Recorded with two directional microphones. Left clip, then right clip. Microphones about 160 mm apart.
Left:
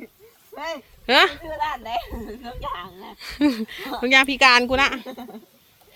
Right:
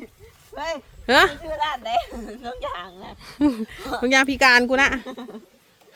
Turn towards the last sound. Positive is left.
turn(degrees=25)  # may be behind; listen again after turning